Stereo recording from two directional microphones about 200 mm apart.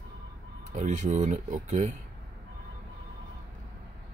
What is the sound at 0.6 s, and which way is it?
Speech, 35° right (ahead or behind).